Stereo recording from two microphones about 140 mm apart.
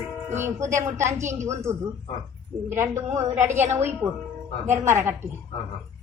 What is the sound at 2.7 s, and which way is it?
A woman's voice, 20° right (ahead or behind).